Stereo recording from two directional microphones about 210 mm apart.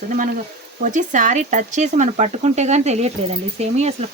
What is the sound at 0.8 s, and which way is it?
Speech, 35° right (ahead or behind).